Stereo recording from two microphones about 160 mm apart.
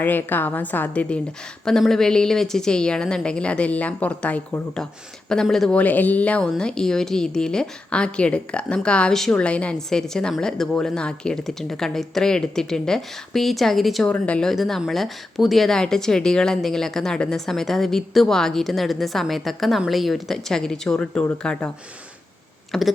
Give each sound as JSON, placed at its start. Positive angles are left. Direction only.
{"t": 0.0, "sound": "a woman's voice", "side_deg": 10}
{"t": 22.7, "sound": "speech", "side_deg": 0}